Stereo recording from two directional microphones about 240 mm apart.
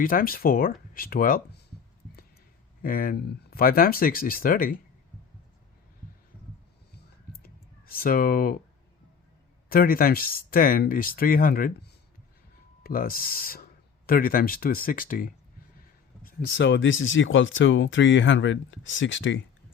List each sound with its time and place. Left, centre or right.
0.0 s speech: left
2.8 s speech: left
6.9 s a sound: left
9.6 s speech: left